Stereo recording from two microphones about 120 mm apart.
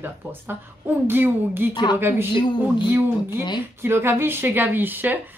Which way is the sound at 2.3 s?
40° left (ahead or behind).